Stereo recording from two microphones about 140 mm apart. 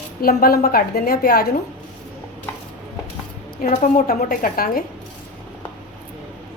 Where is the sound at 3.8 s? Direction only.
85° left.